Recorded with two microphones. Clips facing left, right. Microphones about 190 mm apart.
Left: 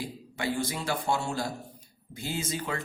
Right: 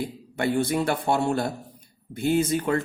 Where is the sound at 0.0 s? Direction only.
60° right (ahead or behind).